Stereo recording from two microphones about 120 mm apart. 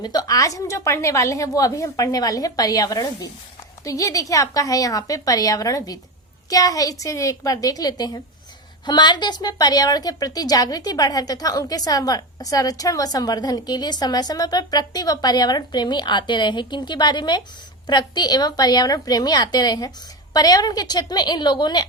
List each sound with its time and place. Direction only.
0.0 s a woman's voice: 35° left (ahead or behind)